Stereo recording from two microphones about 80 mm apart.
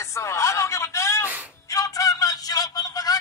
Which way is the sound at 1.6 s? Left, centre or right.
Left.